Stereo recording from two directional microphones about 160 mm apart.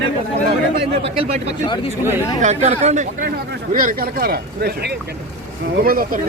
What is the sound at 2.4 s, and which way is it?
Speech, 45° right (ahead or behind).